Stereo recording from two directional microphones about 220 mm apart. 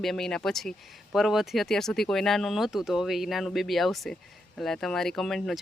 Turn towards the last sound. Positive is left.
turn(degrees=0)  # may be behind; listen again after turning